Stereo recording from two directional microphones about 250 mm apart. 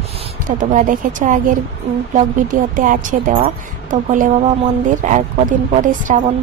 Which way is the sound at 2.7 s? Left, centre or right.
Right.